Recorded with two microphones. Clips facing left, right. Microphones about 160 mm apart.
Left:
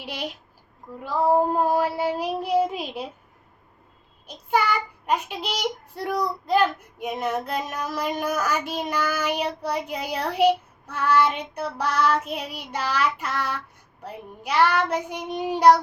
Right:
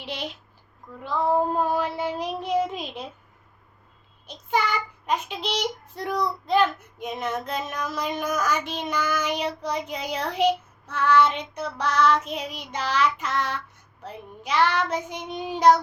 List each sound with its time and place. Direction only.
0.0 s child singing: 10° left (ahead or behind)
0.9 s female singing: 35° left (ahead or behind)
1.3 s child singing: 10° left (ahead or behind)
4.3 s child singing: 10° left (ahead or behind)